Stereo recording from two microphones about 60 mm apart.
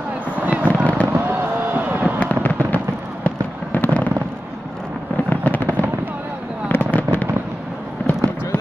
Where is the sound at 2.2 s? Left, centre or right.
Left.